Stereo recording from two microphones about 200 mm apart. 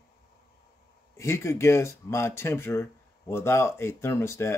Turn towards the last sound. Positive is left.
turn(degrees=15)  # may be behind; listen again after turning